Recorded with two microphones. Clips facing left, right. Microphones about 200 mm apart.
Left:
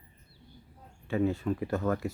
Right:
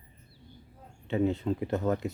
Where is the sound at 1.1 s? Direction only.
20° right (ahead or behind).